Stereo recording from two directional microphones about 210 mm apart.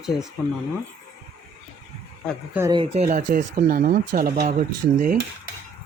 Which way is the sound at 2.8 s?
30° right (ahead or behind).